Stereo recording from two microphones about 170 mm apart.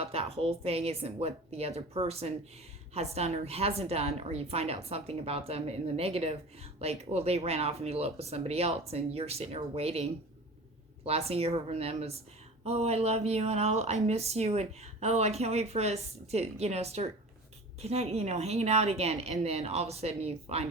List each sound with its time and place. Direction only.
0.0 s a woman's voice: 35° right (ahead or behind)